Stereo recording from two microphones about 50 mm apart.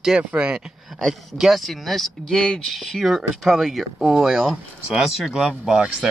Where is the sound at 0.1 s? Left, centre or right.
Centre.